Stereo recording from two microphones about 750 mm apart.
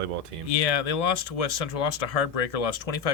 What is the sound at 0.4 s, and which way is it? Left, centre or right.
Speech, left.